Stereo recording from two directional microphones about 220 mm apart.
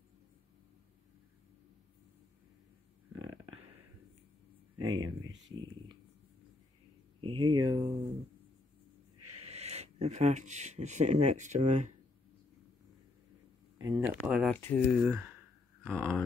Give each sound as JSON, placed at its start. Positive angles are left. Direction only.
{"t": 3.4, "sound": "a sound", "side_deg": -85}
{"t": 4.7, "sound": "speech", "side_deg": -70}
{"t": 5.5, "sound": "speech", "side_deg": -20}
{"t": 7.2, "sound": "speech", "side_deg": -25}
{"t": 9.4, "sound": "speech", "side_deg": -30}
{"t": 13.7, "sound": "a sound", "side_deg": -15}
{"t": 14.0, "sound": "speech", "side_deg": -5}